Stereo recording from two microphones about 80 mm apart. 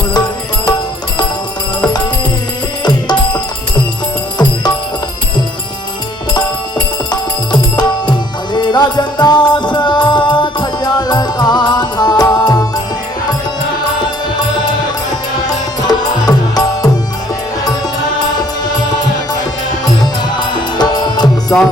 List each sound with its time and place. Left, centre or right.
6.3 s music: left
15.9 s music: left
20.5 s music: left
21.5 s music: left